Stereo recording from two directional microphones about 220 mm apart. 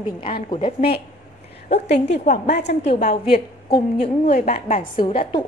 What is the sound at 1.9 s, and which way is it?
A woman's voice, 30° left (ahead or behind).